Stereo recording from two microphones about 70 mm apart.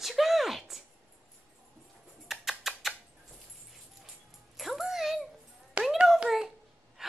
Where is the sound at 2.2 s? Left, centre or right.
Centre.